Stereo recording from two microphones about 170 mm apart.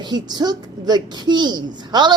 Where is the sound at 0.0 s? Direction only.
25° right (ahead or behind).